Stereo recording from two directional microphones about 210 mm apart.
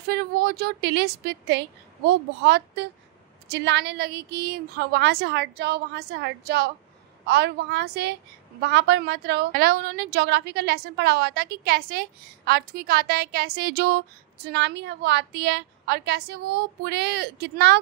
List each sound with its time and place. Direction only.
0.1 s a woman's voice: 50° right (ahead or behind)